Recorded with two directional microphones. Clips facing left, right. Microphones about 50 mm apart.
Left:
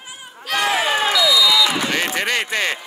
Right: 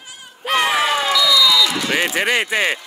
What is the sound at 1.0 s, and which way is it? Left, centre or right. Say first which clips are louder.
Basketball bounce: right 1 dB; centre.